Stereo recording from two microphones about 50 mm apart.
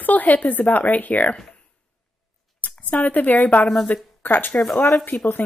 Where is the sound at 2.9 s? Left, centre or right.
Left.